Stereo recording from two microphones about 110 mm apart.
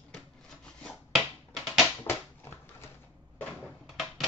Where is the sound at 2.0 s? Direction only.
20° left (ahead or behind).